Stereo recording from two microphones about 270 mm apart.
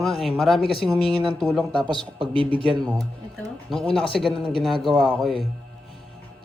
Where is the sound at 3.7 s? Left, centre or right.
Centre.